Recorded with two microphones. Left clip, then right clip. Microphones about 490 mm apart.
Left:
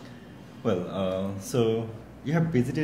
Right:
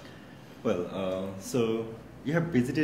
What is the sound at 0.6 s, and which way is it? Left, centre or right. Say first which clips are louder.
Speech: left 2 dB; centre.